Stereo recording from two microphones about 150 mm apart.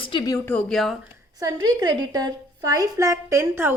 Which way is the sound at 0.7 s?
Centre (ahead or behind).